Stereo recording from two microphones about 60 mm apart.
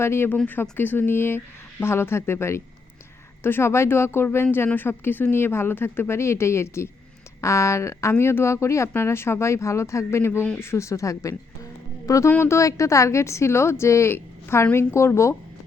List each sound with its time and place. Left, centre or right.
0.0 s a woman's voice: left
0.4 s a woman's voice: left
12.4 s a woman's voice: left